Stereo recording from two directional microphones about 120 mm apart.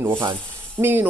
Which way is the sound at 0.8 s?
15° right (ahead or behind).